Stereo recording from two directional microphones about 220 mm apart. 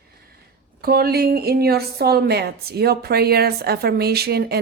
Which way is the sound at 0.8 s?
45° right (ahead or behind).